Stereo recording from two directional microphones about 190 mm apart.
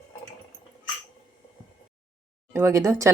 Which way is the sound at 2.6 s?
15° right (ahead or behind).